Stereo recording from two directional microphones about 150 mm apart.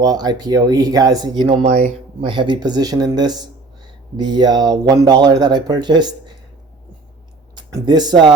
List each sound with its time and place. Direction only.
0.0 s speech: 25° right (ahead or behind)
1.6 s speech: 50° right (ahead or behind)
2.2 s speech: 35° right (ahead or behind)
7.5 s speech: 25° right (ahead or behind)